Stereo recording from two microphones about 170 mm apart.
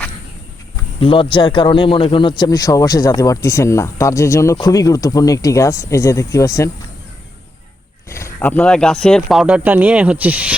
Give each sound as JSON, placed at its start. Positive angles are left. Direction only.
{"t": 0.9, "sound": "a man's voice", "side_deg": 30}
{"t": 8.1, "sound": "speech", "side_deg": 15}